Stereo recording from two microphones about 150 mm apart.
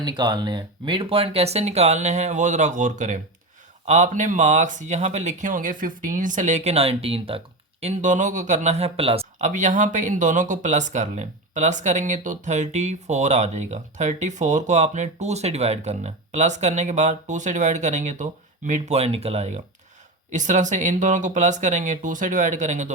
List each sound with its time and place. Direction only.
0.0 s speech: 30° right (ahead or behind)
9.5 s speech: 55° right (ahead or behind)
20.3 s speech: 55° right (ahead or behind)